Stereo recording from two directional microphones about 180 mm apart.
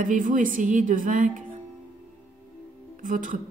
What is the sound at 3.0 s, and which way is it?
Music, 45° right (ahead or behind).